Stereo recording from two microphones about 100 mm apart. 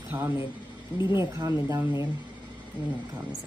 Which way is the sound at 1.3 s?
35° right (ahead or behind).